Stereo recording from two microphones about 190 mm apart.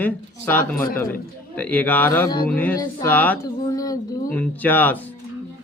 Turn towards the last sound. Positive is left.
turn(degrees=10)  # may be behind; listen again after turning